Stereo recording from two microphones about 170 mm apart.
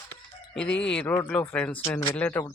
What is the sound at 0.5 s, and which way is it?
Speech, 5° left (ahead or behind).